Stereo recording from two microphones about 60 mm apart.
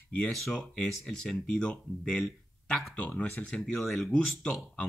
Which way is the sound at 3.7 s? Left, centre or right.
Centre.